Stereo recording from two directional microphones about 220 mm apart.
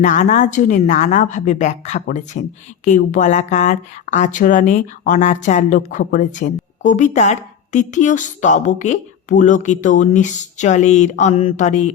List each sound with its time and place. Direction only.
0.0 s speech: 35° left (ahead or behind)